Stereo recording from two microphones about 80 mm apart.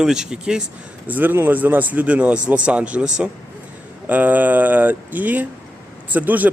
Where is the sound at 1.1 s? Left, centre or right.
Right.